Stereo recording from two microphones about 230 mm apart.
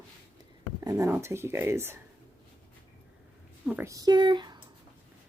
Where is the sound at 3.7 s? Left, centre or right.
Centre.